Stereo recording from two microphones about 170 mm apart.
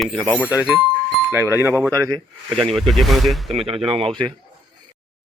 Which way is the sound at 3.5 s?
35° right (ahead or behind).